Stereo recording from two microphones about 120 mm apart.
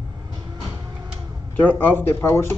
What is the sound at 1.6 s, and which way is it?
Speech, 15° left (ahead or behind).